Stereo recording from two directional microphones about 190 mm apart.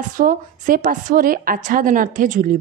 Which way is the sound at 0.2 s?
45° right (ahead or behind).